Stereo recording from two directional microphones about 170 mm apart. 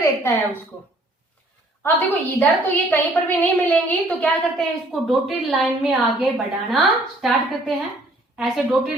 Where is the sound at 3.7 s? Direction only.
10° left (ahead or behind).